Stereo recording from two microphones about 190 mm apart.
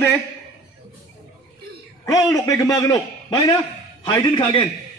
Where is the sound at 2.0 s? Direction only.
20° left (ahead or behind).